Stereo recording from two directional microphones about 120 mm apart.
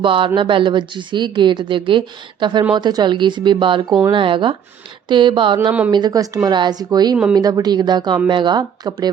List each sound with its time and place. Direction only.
0.0 s speech: 45° right (ahead or behind)